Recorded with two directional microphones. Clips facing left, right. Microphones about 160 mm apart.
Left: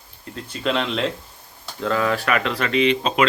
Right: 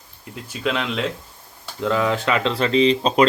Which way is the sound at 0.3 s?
5° right (ahead or behind).